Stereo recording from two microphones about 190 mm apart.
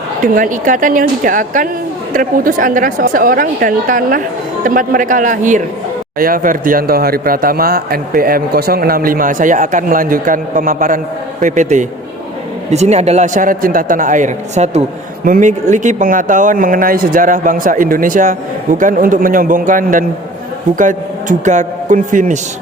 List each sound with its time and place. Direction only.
0.3 s a man's voice: 45° right (ahead or behind)